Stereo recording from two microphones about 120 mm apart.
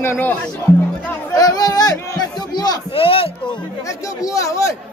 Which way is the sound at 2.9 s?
50° left (ahead or behind).